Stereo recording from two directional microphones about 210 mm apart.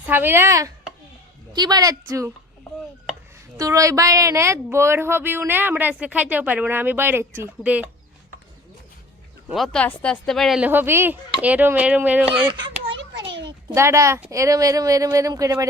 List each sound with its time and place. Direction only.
0.0 s speech: 10° right (ahead or behind)
3.6 s speech: 15° right (ahead or behind)
9.5 s speech: centre (ahead or behind)
12.5 s a child's voice: 20° right (ahead or behind)
12.9 s a sound: 60° right (ahead or behind)
13.4 s speech: 15° right (ahead or behind)